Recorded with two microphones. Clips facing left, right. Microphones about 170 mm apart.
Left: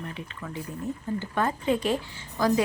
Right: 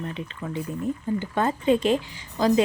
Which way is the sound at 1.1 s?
25° right (ahead or behind).